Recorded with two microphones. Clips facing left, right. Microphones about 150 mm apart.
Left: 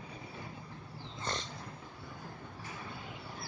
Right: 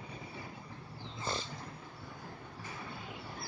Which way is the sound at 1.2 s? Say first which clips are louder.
Right 1 dB; 5° right (ahead or behind).